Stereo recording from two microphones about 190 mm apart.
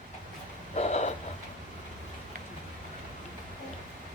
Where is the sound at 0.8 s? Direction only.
35° left (ahead or behind).